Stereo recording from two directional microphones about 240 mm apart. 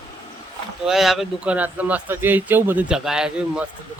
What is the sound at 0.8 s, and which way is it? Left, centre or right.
Speech, centre.